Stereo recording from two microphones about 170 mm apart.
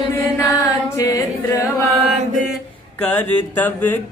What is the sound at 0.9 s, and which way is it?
Singing, 15° left (ahead or behind).